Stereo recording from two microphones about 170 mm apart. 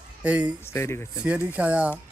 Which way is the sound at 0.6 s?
15° left (ahead or behind).